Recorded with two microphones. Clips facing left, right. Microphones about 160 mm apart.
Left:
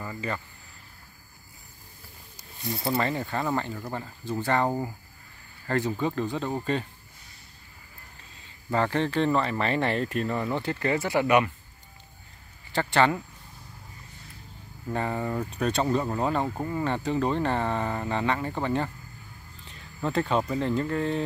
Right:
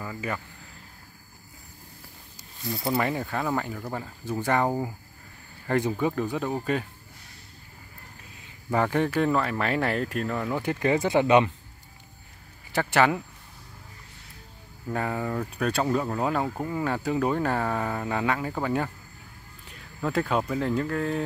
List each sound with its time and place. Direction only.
0.0 s speech: 5° right (ahead or behind)
3.0 s speech: 10° right (ahead or behind)
8.4 s speech: 10° right (ahead or behind)
10.6 s speech: 15° right (ahead or behind)
12.7 s speech: 10° right (ahead or behind)
14.9 s speech: centre (ahead or behind)